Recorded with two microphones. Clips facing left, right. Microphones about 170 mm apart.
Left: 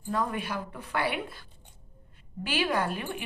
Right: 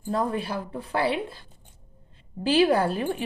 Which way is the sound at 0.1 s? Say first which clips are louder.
Right 4 dB; 30° right (ahead or behind).